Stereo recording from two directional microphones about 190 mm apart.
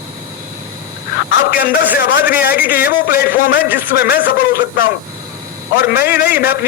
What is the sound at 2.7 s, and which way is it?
Speech, 50° left (ahead or behind).